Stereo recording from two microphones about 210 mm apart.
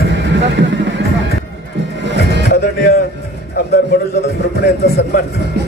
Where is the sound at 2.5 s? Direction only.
50° left (ahead or behind).